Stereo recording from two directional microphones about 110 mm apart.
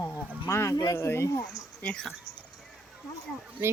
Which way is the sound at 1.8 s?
5° left (ahead or behind).